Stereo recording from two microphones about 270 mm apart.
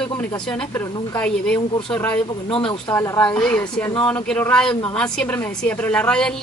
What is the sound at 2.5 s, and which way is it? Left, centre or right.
Speech, centre.